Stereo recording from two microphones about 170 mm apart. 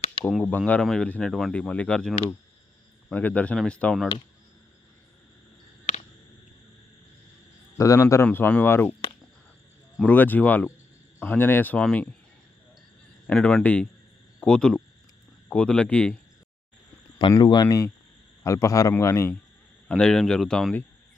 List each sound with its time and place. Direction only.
0.4 s speech: 10° left (ahead or behind)
7.8 s speech: 15° left (ahead or behind)
10.0 s speech: 10° left (ahead or behind)
13.2 s speech: 5° left (ahead or behind)
17.2 s speech: 25° left (ahead or behind)
19.9 s speech: 5° left (ahead or behind)